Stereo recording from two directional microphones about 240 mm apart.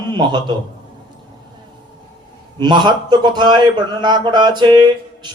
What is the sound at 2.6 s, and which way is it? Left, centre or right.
A man's voice, centre.